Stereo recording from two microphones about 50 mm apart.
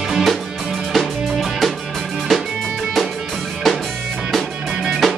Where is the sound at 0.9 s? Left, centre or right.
Centre.